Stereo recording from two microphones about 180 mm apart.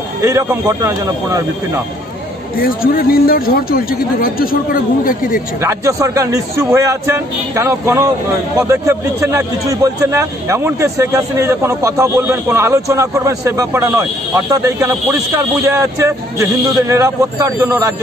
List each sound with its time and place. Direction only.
0.2 s a man's voice: 15° right (ahead or behind)
2.5 s speech: 55° left (ahead or behind)
5.6 s a man's voice: 15° right (ahead or behind)